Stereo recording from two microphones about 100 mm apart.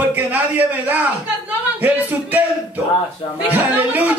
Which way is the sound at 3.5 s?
15° right (ahead or behind).